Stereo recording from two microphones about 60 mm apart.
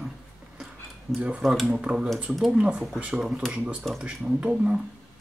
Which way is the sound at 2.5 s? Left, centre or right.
Centre.